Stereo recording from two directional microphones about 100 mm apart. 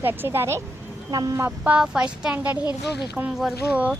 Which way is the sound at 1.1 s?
40° right (ahead or behind).